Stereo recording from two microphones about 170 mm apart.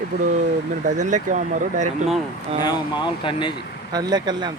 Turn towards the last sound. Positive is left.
turn(degrees=-25)  # may be behind; listen again after turning